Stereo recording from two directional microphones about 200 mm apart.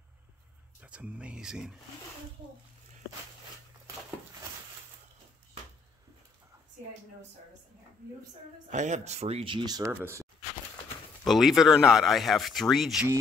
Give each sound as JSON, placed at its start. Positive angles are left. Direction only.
{"t": 0.7, "sound": "speech", "side_deg": -5}
{"t": 8.6, "sound": "speech", "side_deg": -35}
{"t": 11.2, "sound": "speech", "side_deg": 0}